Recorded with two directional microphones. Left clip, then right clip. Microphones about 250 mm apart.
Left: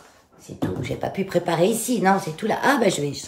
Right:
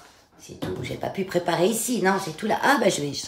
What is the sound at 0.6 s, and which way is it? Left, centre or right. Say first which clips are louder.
Speech: left 4 dB; centre.